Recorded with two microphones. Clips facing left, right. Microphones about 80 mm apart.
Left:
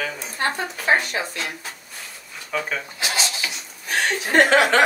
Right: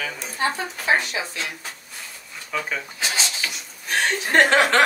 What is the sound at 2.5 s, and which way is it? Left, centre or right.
Speech, centre.